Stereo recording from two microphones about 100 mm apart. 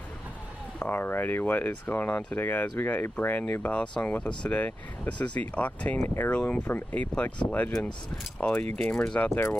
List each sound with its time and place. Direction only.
0.7 s speech: 20° left (ahead or behind)
9.3 s speech: 20° left (ahead or behind)